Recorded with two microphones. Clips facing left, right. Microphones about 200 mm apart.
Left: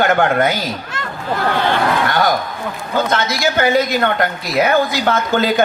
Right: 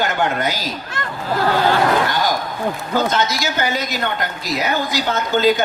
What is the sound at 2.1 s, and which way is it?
A man's voice, 60° left (ahead or behind).